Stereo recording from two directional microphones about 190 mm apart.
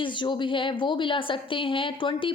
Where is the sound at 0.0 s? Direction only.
25° left (ahead or behind).